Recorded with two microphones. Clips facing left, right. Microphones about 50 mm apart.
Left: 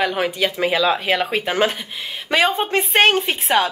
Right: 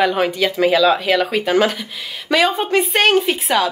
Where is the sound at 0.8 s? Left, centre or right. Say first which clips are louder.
Right 3 dB; left.